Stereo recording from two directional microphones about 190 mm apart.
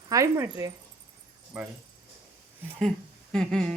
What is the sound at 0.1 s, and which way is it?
Speech, 15° right (ahead or behind).